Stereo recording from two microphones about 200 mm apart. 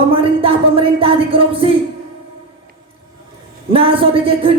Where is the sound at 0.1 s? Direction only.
25° right (ahead or behind).